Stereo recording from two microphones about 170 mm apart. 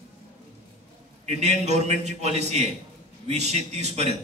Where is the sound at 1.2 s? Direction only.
40° right (ahead or behind).